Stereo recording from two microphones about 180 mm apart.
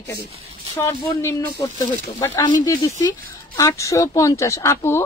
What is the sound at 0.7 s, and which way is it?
Speech, 15° left (ahead or behind).